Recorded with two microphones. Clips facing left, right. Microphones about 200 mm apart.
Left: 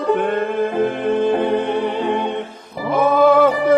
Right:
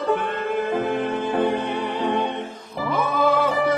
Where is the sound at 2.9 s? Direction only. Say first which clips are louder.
Left 8 dB; 55° left (ahead or behind).